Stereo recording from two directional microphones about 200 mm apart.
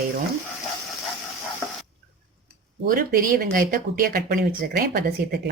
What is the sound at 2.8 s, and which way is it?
Speech, 45° right (ahead or behind).